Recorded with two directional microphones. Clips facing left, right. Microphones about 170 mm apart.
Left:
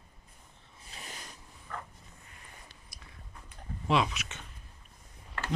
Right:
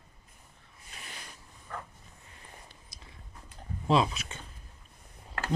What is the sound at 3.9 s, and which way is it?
Speech, 30° right (ahead or behind).